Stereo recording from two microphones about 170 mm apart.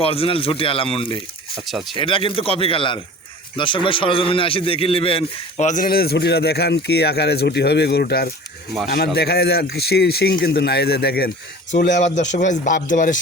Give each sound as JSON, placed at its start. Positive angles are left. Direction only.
{"t": 0.0, "sound": "speech", "side_deg": 35}
{"t": 1.6, "sound": "speech", "side_deg": 0}
{"t": 2.0, "sound": "a man's voice", "side_deg": 30}
{"t": 11.9, "sound": "speech", "side_deg": 45}